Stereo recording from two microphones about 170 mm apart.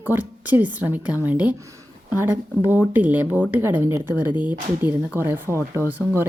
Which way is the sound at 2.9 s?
10° right (ahead or behind).